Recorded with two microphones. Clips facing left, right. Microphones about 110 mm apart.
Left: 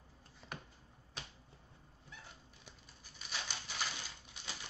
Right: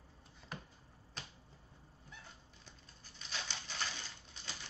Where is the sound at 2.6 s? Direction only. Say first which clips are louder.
Left 1 dB; 10° left (ahead or behind).